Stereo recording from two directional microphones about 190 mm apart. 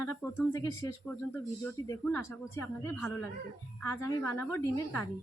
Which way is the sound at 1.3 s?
15° left (ahead or behind).